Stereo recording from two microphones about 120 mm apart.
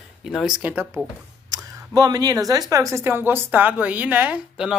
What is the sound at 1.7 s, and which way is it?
Speech, 30° right (ahead or behind).